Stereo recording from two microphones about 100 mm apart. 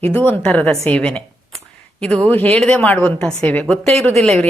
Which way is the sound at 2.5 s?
10° left (ahead or behind).